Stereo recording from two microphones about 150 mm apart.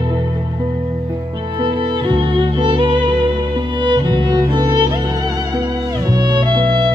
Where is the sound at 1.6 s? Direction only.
35° right (ahead or behind).